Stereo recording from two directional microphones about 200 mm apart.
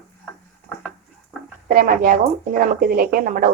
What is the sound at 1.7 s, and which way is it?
Speech, 45° right (ahead or behind).